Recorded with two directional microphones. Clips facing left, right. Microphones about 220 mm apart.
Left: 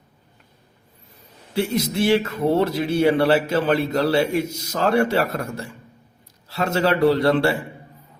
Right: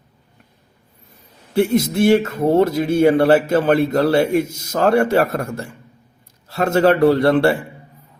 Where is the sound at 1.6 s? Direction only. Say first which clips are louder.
Right 6 dB; 50° right (ahead or behind).